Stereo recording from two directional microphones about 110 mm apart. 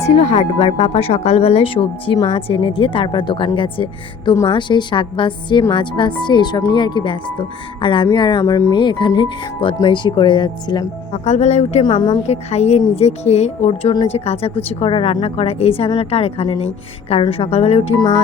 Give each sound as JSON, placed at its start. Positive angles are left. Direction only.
{"t": 0.0, "sound": "speech", "side_deg": 75}
{"t": 8.4, "sound": "speech", "side_deg": 30}
{"t": 8.7, "sound": "speech", "side_deg": 45}
{"t": 11.1, "sound": "speech", "side_deg": 85}
{"t": 11.8, "sound": "speech", "side_deg": 45}
{"t": 12.2, "sound": "a woman's voice", "side_deg": 85}
{"t": 14.1, "sound": "a woman's voice", "side_deg": 70}